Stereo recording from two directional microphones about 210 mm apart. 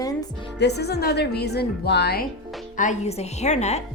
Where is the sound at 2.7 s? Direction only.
35° left (ahead or behind).